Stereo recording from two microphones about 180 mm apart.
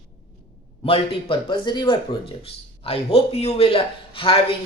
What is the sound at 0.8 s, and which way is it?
A man's voice, 30° left (ahead or behind).